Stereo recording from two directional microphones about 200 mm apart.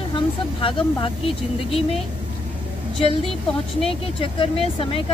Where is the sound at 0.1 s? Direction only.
25° left (ahead or behind).